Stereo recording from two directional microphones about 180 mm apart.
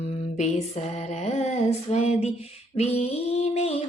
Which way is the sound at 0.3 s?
40° left (ahead or behind).